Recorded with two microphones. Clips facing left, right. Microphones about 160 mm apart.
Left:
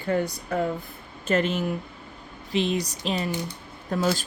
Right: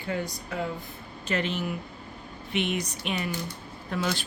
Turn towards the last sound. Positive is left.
turn(degrees=40)  # may be behind; listen again after turning